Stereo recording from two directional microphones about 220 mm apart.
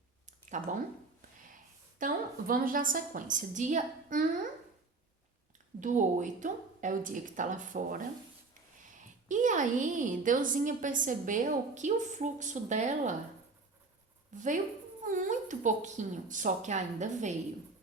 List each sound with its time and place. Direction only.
0.6 s a woman's voice: 35° right (ahead or behind)
2.0 s a woman's voice: 40° right (ahead or behind)
5.8 s a woman's voice: 35° right (ahead or behind)
9.3 s a woman's voice: 35° right (ahead or behind)
14.3 s a woman's voice: 35° right (ahead or behind)